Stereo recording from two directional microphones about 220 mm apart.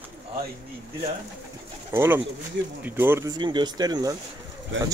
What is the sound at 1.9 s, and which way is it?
Speech, 10° right (ahead or behind).